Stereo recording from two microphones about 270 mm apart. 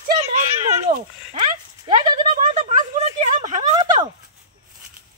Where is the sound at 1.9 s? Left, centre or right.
Centre.